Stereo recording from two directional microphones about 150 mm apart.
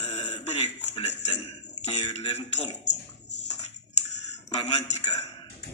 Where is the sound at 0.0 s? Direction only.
45° left (ahead or behind).